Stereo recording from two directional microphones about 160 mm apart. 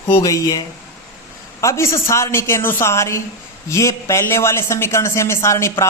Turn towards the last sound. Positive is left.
turn(degrees=20)  # may be behind; listen again after turning